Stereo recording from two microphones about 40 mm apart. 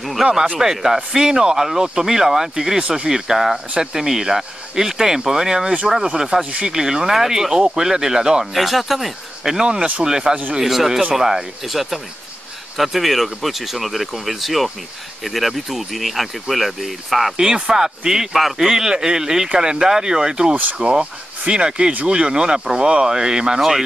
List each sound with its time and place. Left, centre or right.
0.0 s speech: centre
8.5 s speech: centre
9.5 s speech: centre
17.4 s speech: centre